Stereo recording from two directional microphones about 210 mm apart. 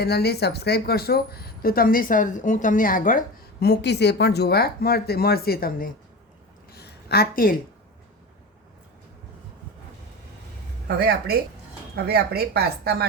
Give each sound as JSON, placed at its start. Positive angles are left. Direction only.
{"t": 0.0, "sound": "a woman's voice", "side_deg": 50}
{"t": 6.7, "sound": "a sound", "side_deg": 50}
{"t": 10.8, "sound": "speech", "side_deg": -45}